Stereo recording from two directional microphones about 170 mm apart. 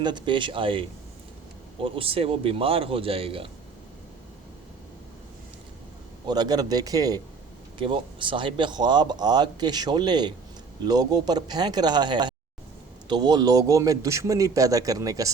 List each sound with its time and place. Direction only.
0.0 s a man's voice: 25° right (ahead or behind)
6.2 s a man's voice: 25° right (ahead or behind)